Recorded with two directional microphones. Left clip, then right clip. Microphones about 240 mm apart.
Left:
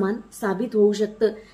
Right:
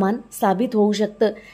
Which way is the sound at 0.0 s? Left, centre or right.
Right.